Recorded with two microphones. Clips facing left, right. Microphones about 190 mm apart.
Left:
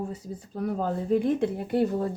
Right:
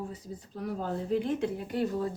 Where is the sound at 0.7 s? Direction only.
50° left (ahead or behind).